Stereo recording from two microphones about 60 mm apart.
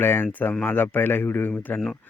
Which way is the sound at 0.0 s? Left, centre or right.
Left.